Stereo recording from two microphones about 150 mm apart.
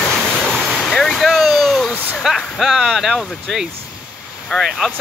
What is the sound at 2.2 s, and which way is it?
Speech, centre (ahead or behind).